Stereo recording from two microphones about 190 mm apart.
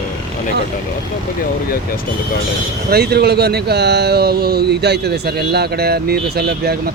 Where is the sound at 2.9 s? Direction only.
55° right (ahead or behind).